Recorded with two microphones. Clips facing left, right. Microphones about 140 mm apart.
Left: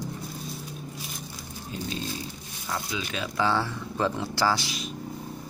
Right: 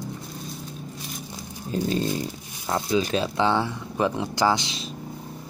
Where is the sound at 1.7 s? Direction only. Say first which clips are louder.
Right 9 dB; 40° right (ahead or behind); by 4.9 s 25° right (ahead or behind).